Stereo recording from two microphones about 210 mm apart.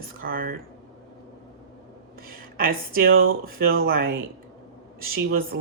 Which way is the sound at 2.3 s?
45° right (ahead or behind).